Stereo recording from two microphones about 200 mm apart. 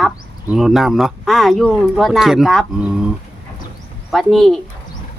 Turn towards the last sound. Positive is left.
turn(degrees=0)  # may be behind; listen again after turning